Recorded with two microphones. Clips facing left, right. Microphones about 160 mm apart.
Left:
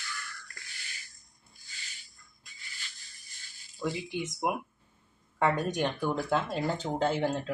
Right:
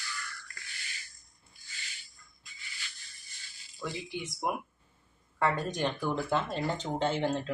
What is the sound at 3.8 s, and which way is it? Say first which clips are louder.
Speech: left 4 dB; 20° left (ahead or behind).